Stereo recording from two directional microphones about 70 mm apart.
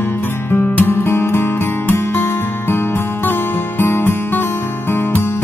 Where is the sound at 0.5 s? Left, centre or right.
Left.